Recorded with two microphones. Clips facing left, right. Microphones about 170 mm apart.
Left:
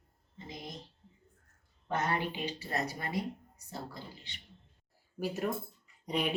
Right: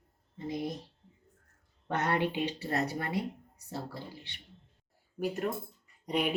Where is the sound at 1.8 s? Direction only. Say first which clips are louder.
Right 3 dB; 65° right (ahead or behind).